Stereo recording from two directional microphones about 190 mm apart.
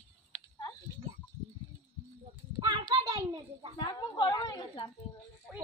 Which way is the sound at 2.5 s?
20° right (ahead or behind).